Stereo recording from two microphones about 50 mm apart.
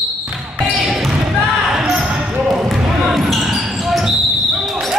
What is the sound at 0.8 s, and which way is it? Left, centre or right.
Basketball bounce, centre.